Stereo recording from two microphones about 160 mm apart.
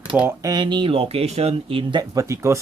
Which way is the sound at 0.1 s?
5° right (ahead or behind).